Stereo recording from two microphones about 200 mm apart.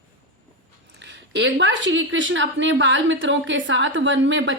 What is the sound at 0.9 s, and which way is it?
A woman's voice, 65° right (ahead or behind).